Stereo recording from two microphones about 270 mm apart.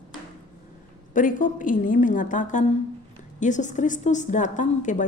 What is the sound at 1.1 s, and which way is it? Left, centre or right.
A woman's voice, left.